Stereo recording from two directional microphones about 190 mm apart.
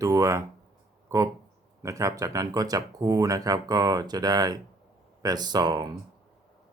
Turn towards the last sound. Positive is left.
turn(degrees=-20)  # may be behind; listen again after turning